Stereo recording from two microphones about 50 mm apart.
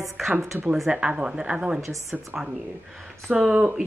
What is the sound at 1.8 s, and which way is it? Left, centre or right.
Speech, right.